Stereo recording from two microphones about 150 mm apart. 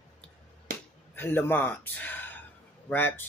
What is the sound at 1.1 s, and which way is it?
Speech, 15° left (ahead or behind).